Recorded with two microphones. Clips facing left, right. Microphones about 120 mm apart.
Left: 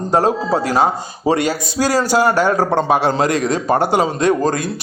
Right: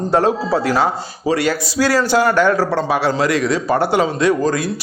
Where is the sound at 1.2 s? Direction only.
25° left (ahead or behind).